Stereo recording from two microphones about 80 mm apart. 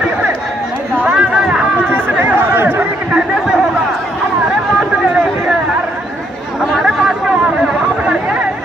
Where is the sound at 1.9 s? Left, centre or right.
Right.